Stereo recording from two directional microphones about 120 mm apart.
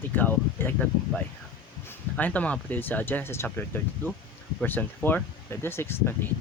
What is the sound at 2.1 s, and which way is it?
Speech, 10° left (ahead or behind).